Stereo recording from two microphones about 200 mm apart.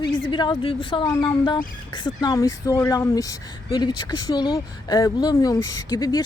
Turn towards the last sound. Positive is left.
turn(degrees=20)  # may be behind; listen again after turning